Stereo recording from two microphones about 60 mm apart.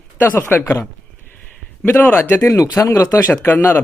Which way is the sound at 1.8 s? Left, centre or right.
Left.